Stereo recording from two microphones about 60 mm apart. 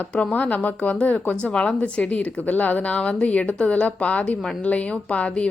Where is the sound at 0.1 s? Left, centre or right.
Centre.